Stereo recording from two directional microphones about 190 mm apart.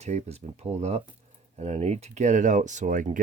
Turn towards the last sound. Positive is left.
turn(degrees=-45)  # may be behind; listen again after turning